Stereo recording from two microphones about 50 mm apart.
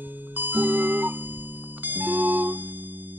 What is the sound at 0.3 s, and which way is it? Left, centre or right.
Music, right.